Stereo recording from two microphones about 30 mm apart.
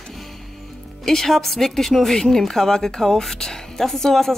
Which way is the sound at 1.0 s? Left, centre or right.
Centre.